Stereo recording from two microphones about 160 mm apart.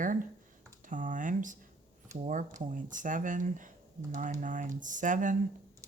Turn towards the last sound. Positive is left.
turn(degrees=-55)  # may be behind; listen again after turning